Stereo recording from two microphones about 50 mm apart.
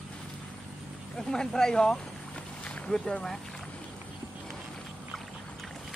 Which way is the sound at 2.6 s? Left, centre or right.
Left.